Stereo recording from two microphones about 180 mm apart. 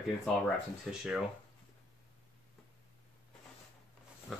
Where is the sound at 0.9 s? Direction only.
Centre (ahead or behind).